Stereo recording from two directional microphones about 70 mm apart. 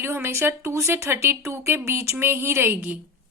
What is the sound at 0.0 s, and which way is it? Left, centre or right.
Speech, right.